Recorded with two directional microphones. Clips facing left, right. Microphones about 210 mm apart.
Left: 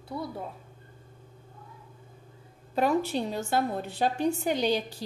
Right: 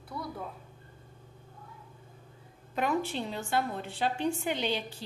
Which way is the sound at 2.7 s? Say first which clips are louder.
Left 5 dB; 35° left (ahead or behind).